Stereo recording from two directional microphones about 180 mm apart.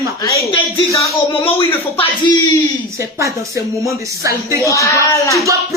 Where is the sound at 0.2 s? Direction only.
15° left (ahead or behind).